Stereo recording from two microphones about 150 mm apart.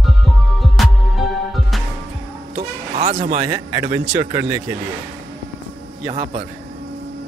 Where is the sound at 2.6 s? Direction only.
40° right (ahead or behind).